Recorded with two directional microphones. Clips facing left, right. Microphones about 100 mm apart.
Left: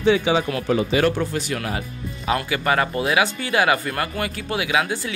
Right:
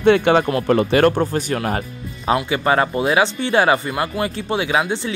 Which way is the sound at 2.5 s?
25° right (ahead or behind).